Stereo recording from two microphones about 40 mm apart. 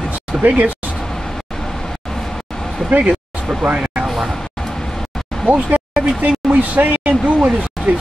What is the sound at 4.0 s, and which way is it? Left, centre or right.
Speech, centre.